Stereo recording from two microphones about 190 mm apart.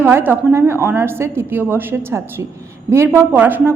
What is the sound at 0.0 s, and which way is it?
A woman's voice, 10° right (ahead or behind).